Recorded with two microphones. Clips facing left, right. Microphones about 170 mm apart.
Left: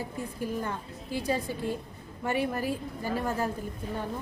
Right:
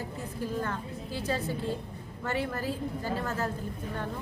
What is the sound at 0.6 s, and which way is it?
A woman's voice, 15° left (ahead or behind).